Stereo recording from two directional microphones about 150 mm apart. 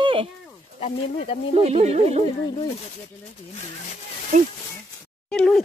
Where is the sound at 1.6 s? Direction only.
45° right (ahead or behind).